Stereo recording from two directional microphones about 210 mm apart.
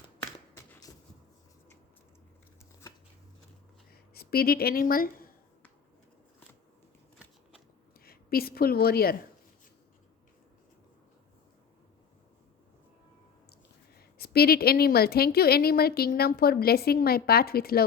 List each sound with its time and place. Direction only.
0.5 s a sound: 10° left (ahead or behind)
3.9 s speech: 45° left (ahead or behind)
8.0 s a woman's voice: 45° left (ahead or behind)
14.2 s a woman's voice: 45° left (ahead or behind)